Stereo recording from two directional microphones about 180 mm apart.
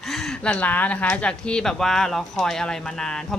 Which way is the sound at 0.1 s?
Centre (ahead or behind).